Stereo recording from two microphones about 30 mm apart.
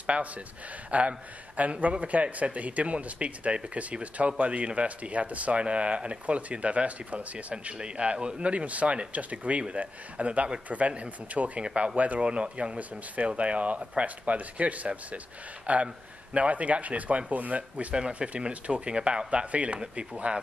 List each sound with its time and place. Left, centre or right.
0.0 s speech: right
5.6 s speech: right
7.7 s speech: right
8.5 s speech: right
11.6 s speech: right
12.7 s speech: right
14.2 s speech: right
17.9 s speech: right